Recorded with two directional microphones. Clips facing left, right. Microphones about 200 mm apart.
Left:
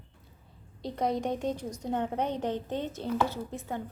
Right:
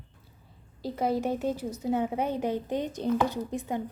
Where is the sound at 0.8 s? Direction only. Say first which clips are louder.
Right 2 dB; 5° right (ahead or behind).